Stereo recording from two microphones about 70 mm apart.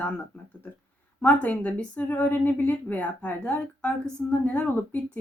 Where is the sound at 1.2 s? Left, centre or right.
Left.